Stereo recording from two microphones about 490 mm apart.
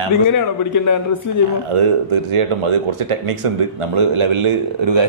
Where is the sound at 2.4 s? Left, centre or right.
Right.